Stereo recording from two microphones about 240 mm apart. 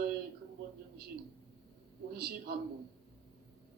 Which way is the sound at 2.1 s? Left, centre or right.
Right.